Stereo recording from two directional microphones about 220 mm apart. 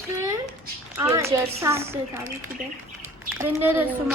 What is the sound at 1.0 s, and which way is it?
Speech, 10° right (ahead or behind).